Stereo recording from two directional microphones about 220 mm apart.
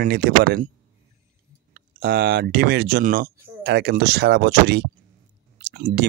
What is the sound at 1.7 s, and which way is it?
Speech, 45° right (ahead or behind).